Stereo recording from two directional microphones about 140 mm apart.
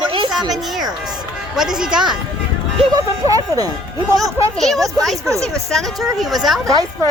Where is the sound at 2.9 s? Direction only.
25° right (ahead or behind).